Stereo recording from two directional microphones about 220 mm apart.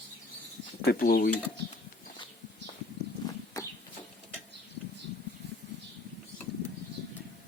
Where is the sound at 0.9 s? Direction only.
45° left (ahead or behind).